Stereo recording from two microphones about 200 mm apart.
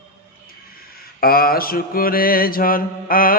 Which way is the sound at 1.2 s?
50° left (ahead or behind).